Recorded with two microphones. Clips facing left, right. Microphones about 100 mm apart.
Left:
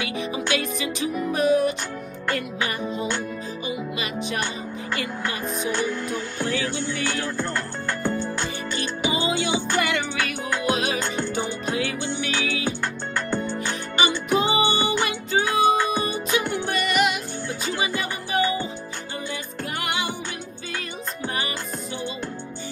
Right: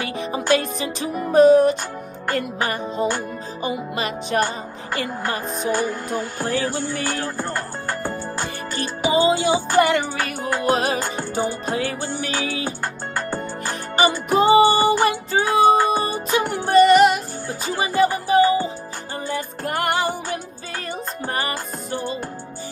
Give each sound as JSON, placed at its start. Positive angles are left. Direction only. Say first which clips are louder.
{"t": 0.0, "sound": "music", "louder": "right 2 dB", "side_deg": -45}
{"t": 19.3, "sound": "music", "louder": "right 6 dB", "side_deg": -45}
{"t": 21.4, "sound": "music", "louder": "right 3 dB", "side_deg": -45}